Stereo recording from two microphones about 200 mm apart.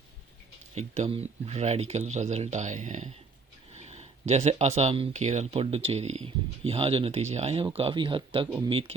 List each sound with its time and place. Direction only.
0.8 s speech: 30° right (ahead or behind)